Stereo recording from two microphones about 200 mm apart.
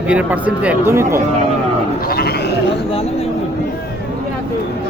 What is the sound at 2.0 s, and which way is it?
Sheep, 50° left (ahead or behind).